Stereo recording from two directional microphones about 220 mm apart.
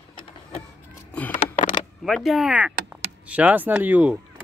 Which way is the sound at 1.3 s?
35° left (ahead or behind).